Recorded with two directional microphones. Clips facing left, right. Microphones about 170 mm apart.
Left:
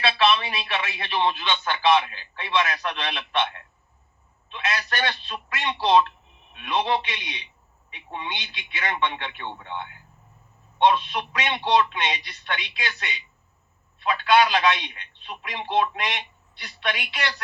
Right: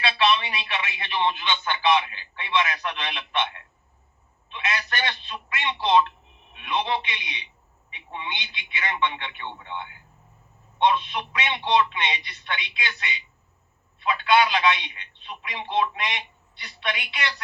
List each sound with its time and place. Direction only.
0.0 s a sound: 35° left (ahead or behind)
4.5 s telephone: 40° left (ahead or behind)
6.6 s a man's voice: 40° left (ahead or behind)